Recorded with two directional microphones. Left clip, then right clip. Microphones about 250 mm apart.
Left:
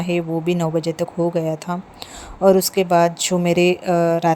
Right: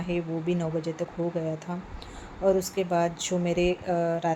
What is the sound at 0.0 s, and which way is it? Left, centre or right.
Speech, left.